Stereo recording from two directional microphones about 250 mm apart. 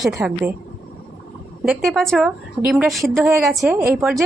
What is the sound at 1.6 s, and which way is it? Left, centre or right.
A woman's voice, centre.